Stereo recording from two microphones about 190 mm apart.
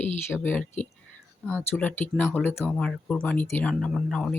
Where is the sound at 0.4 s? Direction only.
10° left (ahead or behind).